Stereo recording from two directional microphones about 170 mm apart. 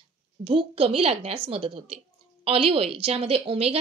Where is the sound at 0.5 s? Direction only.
35° right (ahead or behind).